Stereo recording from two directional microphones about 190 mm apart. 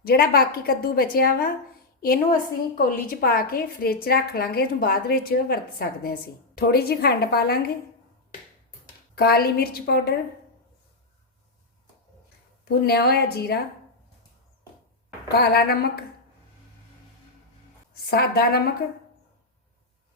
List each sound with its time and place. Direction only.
0.0 s a woman's voice: 55° left (ahead or behind)
9.1 s a woman's voice: 55° left (ahead or behind)
12.6 s a woman's voice: 55° left (ahead or behind)
15.3 s a woman's voice: 55° left (ahead or behind)
18.1 s a woman's voice: 55° left (ahead or behind)